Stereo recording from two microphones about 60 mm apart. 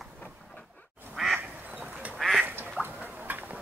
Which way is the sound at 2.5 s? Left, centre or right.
Right.